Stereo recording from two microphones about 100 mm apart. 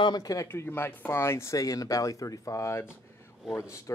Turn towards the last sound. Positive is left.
turn(degrees=30)  # may be behind; listen again after turning